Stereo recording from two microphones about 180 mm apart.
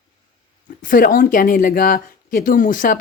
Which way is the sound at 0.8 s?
50° left (ahead or behind).